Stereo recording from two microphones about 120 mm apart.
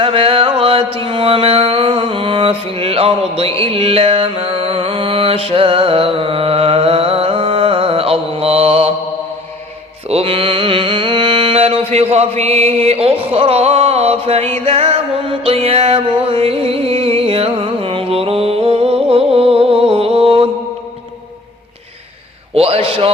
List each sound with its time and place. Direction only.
0.0 s music: 50° right (ahead or behind)
10.1 s mantra: 55° right (ahead or behind)
12.1 s music: 60° right (ahead or behind)
22.5 s a sound: 55° right (ahead or behind)